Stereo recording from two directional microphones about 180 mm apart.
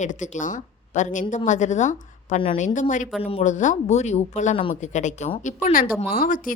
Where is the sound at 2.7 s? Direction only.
45° left (ahead or behind).